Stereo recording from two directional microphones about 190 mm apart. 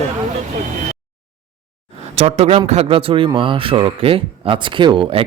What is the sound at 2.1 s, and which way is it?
A man's voice, 35° right (ahead or behind).